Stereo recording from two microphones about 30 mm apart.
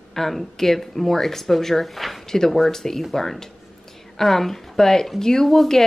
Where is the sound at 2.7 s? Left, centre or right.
Centre.